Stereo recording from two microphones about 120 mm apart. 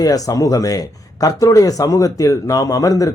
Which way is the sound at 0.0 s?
30° left (ahead or behind).